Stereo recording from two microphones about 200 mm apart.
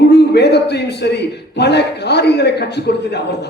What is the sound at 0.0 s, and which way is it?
A man's voice, 55° left (ahead or behind).